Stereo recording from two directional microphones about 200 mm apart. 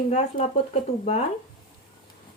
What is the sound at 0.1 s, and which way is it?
Speech, 35° left (ahead or behind).